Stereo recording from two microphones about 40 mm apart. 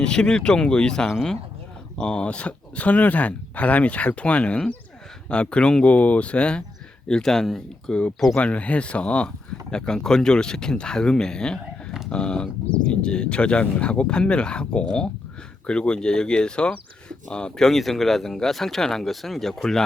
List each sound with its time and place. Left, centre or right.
0.0 s speech: left
5.9 s speech: left
7.1 s speech: centre
8.4 s speech: left
17.7 s speech: centre